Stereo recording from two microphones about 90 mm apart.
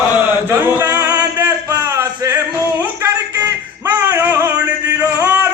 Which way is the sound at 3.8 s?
20° right (ahead or behind).